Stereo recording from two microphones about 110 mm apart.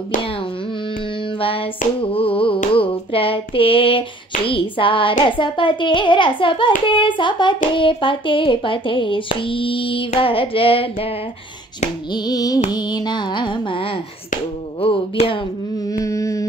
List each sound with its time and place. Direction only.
1.4 s hands: 55° left (ahead or behind)
4.5 s a child's voice: 55° left (ahead or behind)
12.1 s hands: 35° left (ahead or behind)
12.7 s a child's voice: 40° left (ahead or behind)
14.8 s hands: 55° left (ahead or behind)
15.9 s a sound: 30° left (ahead or behind)